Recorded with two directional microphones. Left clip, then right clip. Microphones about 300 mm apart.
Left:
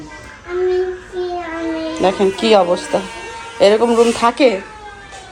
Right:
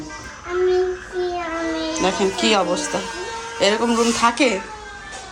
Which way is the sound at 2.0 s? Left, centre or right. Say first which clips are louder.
Left 5 dB; centre.